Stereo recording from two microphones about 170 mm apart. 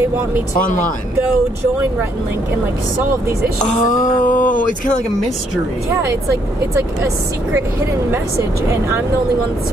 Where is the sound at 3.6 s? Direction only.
50° left (ahead or behind).